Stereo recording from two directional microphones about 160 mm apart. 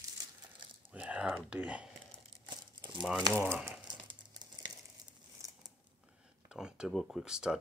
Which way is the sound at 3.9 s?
30° right (ahead or behind).